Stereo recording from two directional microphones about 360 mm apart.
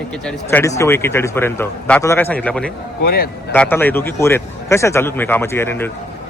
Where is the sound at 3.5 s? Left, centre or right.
Centre.